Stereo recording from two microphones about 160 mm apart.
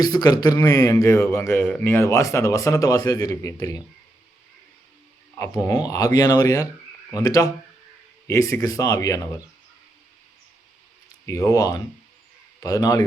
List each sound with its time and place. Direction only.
0.0 s a man's voice: 25° left (ahead or behind)
5.4 s a man's voice: 20° left (ahead or behind)
11.3 s a man's voice: 20° left (ahead or behind)